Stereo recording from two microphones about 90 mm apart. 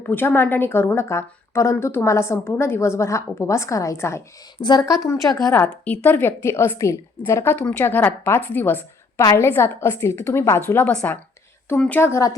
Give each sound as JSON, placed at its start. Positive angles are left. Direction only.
{"t": 0.0, "sound": "a woman's voice", "side_deg": 25}
{"t": 4.6, "sound": "speech", "side_deg": 55}
{"t": 4.9, "sound": "a woman's voice", "side_deg": 35}
{"t": 5.6, "sound": "a woman's voice", "side_deg": 15}
{"t": 7.7, "sound": "a woman's voice", "side_deg": 20}
{"t": 11.9, "sound": "a woman's voice", "side_deg": 30}